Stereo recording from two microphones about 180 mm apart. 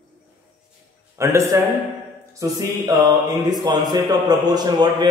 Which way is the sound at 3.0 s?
20° right (ahead or behind).